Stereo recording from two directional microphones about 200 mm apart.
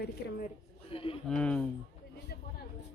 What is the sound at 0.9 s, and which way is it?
Speech, 30° left (ahead or behind).